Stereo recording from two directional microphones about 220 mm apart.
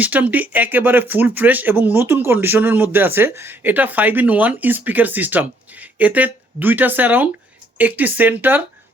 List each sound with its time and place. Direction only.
0.0 s speech: 5° right (ahead or behind)